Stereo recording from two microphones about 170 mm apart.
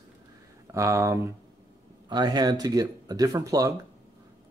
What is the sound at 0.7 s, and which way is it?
Speech, 20° right (ahead or behind).